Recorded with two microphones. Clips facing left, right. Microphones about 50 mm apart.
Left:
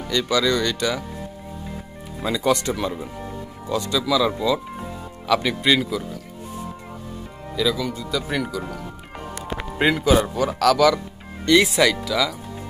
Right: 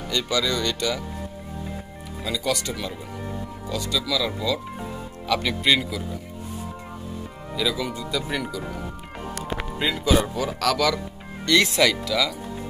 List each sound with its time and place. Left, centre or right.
0.1 s speech: centre
0.7 s speech: centre
2.2 s speech: left
2.7 s speech: centre
7.5 s speech: centre
9.3 s music: left
10.1 s speech: centre